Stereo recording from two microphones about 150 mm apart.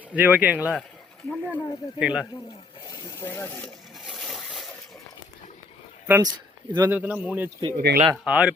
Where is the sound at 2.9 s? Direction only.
20° left (ahead or behind).